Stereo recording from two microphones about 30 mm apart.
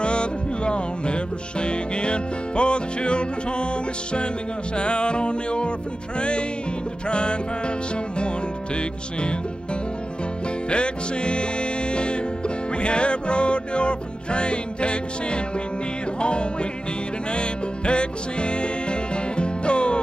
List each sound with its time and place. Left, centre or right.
0.0 s music: left
4.7 s music: left
10.7 s music: left